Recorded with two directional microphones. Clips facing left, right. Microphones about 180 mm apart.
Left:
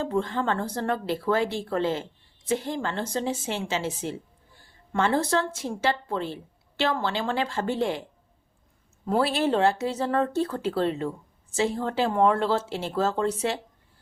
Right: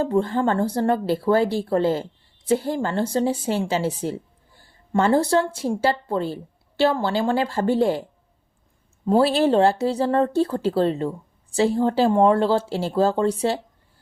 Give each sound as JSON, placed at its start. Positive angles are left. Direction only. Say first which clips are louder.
{"t": 0.0, "sound": "speech", "louder": "right 6 dB", "side_deg": -35}
{"t": 9.0, "sound": "speech", "louder": "right 6 dB", "side_deg": -30}